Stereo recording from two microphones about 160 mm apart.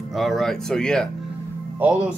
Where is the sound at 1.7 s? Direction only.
10° right (ahead or behind).